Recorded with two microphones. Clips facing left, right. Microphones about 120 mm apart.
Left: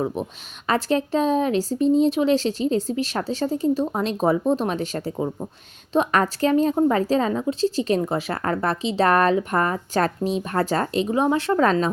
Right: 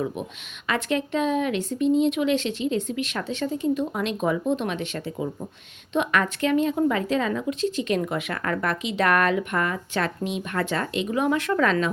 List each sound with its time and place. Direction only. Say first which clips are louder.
0.2 s speech: left 4 dB; 35° left (ahead or behind)
5.1 s speech: left 3 dB; 25° left (ahead or behind)